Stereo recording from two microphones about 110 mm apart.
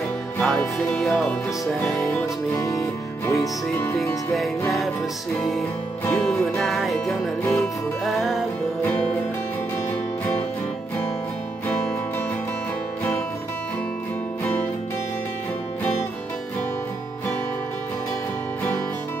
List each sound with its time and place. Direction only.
0.4 s music: 5° left (ahead or behind)
2.0 s music: 15° left (ahead or behind)
2.6 s music: 25° left (ahead or behind)
4.3 s music: centre (ahead or behind)
6.0 s music: 5° left (ahead or behind)